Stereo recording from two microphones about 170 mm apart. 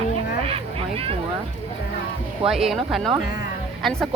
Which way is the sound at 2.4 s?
Centre (ahead or behind).